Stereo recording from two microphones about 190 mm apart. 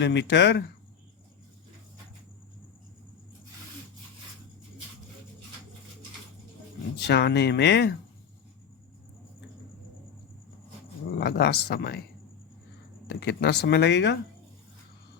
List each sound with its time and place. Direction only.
0.0 s speech: 65° left (ahead or behind)
7.1 s speech: 60° left (ahead or behind)
11.2 s speech: 60° left (ahead or behind)
13.1 s speech: 60° left (ahead or behind)